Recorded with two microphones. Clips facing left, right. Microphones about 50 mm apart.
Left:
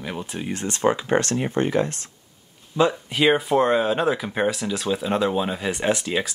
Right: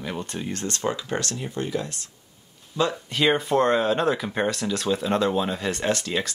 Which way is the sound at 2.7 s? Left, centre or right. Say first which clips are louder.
Left 4 dB; centre.